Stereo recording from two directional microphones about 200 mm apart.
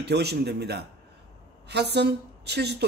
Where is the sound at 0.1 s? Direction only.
55° right (ahead or behind).